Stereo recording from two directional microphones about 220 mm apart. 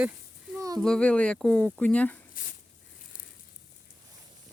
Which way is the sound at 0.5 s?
15° right (ahead or behind).